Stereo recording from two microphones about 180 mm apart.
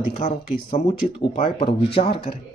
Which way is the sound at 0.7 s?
35° left (ahead or behind).